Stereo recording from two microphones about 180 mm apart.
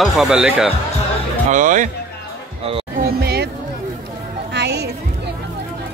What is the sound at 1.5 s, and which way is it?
Speech, 45° right (ahead or behind).